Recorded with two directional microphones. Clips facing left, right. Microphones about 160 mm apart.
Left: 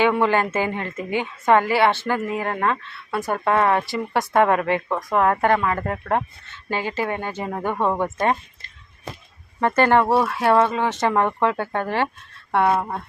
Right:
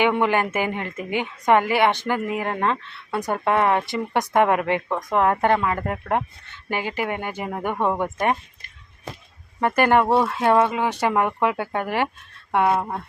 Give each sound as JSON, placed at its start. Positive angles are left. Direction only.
{"t": 0.0, "sound": "a woman's voice", "side_deg": -20}
{"t": 9.6, "sound": "a woman's voice", "side_deg": -15}